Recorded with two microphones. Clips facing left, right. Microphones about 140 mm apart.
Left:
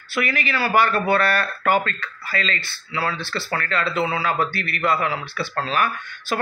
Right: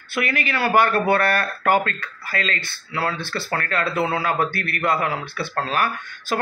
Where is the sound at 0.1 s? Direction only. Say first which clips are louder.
Even; 50° right (ahead or behind).